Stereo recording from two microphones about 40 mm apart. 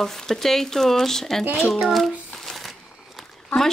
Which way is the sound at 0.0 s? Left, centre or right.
Centre.